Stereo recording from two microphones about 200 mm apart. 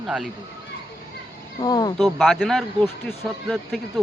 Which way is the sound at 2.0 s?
Centre (ahead or behind).